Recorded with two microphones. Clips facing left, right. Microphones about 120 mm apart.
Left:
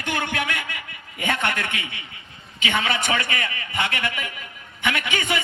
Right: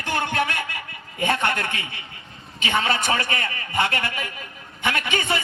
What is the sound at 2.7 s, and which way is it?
A man's voice, 35° right (ahead or behind).